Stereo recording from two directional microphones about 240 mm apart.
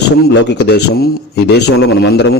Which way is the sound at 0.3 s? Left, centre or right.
Left.